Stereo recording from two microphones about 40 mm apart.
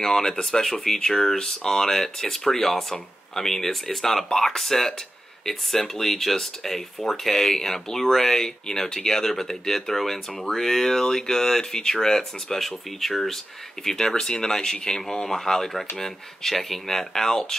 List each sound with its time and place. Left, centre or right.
0.0 s speech: centre